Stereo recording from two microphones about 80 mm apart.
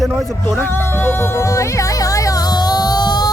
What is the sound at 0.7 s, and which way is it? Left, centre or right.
Music, left.